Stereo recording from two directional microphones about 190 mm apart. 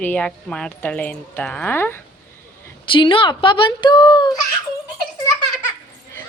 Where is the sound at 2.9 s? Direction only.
25° left (ahead or behind).